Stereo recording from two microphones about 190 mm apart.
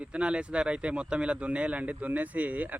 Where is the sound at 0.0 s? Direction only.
5° right (ahead or behind).